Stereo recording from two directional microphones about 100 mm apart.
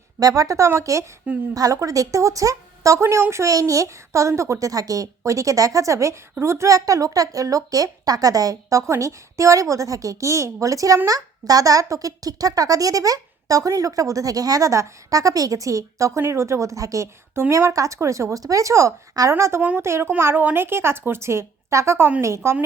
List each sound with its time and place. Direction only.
0.2 s speech: 35° right (ahead or behind)